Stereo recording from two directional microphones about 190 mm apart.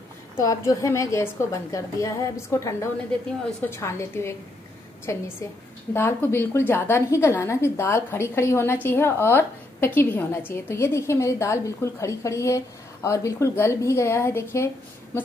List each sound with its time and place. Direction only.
0.4 s a woman's voice: 15° left (ahead or behind)